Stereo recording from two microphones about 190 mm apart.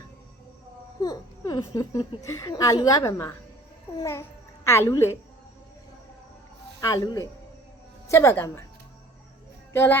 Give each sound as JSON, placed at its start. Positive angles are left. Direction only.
{"t": 1.0, "sound": "a child's voice", "side_deg": 20}
{"t": 6.8, "sound": "speech", "side_deg": 15}
{"t": 9.7, "sound": "speech", "side_deg": 10}